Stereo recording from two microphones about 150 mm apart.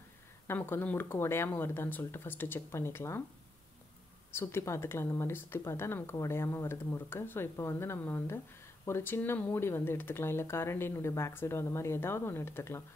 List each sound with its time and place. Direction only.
0.5 s speech: 15° left (ahead or behind)
4.3 s speech: 15° left (ahead or behind)